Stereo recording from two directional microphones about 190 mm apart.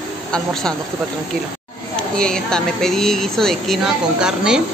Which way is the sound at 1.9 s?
5° left (ahead or behind).